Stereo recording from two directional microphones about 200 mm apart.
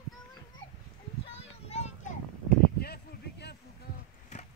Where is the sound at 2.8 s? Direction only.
55° left (ahead or behind).